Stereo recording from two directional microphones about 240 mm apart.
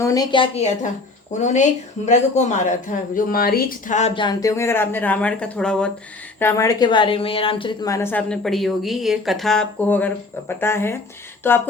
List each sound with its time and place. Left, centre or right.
0.0 s a woman's voice: centre